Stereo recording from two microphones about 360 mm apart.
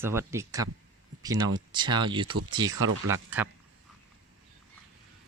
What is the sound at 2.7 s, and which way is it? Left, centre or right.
Speech, right.